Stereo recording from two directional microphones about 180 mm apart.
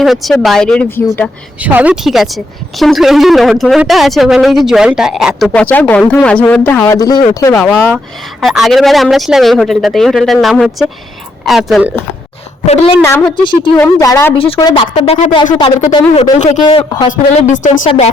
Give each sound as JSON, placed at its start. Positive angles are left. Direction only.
{"t": 0.0, "sound": "speech", "side_deg": 0}
{"t": 1.6, "sound": "speech", "side_deg": -10}
{"t": 5.5, "sound": "speech", "side_deg": 10}
{"t": 7.5, "sound": "speech", "side_deg": 10}
{"t": 7.9, "sound": "speech", "side_deg": 0}
{"t": 12.6, "sound": "speech", "side_deg": 35}
{"t": 13.0, "sound": "speech", "side_deg": 10}
{"t": 14.3, "sound": "speech", "side_deg": 30}
{"t": 16.4, "sound": "speech", "side_deg": 40}
{"t": 17.8, "sound": "speech", "side_deg": 30}